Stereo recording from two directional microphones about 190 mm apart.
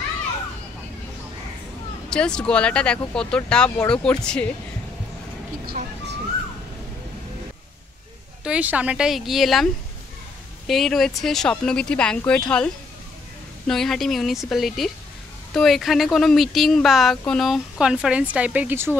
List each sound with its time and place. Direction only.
2.0 s speech: 5° left (ahead or behind)
5.7 s a sound: 55° right (ahead or behind)
8.5 s speech: 5° right (ahead or behind)
10.7 s speech: centre (ahead or behind)